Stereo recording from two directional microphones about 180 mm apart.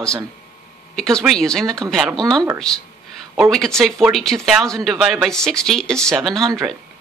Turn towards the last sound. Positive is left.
turn(degrees=0)  # may be behind; listen again after turning